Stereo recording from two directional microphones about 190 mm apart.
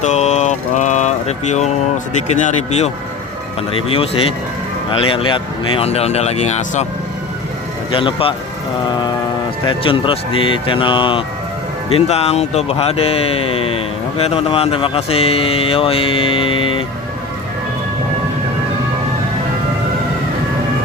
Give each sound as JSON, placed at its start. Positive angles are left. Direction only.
{"t": 0.0, "sound": "music", "side_deg": 35}
{"t": 2.1, "sound": "speech", "side_deg": 35}
{"t": 7.9, "sound": "speech", "side_deg": 25}
{"t": 9.6, "sound": "speech", "side_deg": 25}